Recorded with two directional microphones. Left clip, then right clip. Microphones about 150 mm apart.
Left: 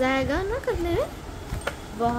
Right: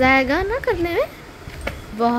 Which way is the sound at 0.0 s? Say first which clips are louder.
Right 8 dB; 50° right (ahead or behind).